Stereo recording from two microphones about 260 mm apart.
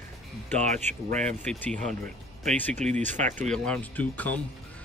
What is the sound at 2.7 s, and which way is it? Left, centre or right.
Speech, right.